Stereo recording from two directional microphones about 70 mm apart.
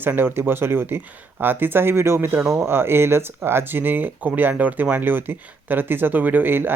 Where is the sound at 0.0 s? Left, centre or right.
Right.